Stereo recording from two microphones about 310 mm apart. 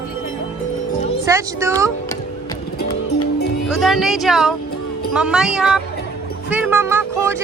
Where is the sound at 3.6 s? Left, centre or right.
Centre.